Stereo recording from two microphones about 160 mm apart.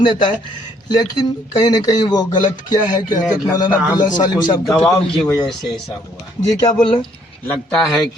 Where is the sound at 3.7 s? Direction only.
10° right (ahead or behind).